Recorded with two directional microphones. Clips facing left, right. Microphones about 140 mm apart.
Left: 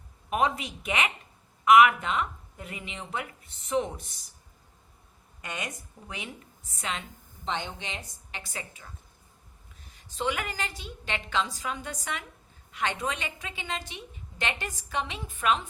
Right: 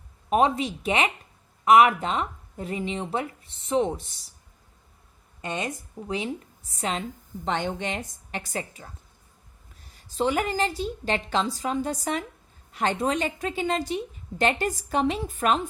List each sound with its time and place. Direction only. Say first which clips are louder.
0.3 s a woman's voice: right 5 dB; 30° right (ahead or behind)
5.4 s a woman's voice: right 7 dB; 30° right (ahead or behind)
7.4 s a woman's voice: right 6 dB; 50° right (ahead or behind)
10.2 s a woman's voice: right 7 dB; 35° right (ahead or behind)